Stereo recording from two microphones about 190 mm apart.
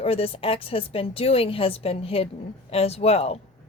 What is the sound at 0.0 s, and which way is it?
A woman's voice, 30° left (ahead or behind).